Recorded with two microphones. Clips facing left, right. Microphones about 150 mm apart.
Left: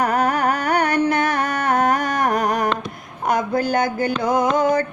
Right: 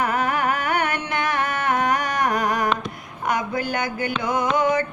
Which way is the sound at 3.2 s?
40° left (ahead or behind).